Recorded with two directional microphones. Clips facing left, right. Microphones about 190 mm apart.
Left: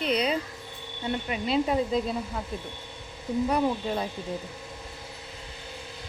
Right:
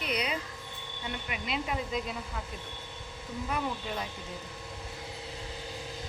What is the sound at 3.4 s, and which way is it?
Speech, 35° left (ahead or behind).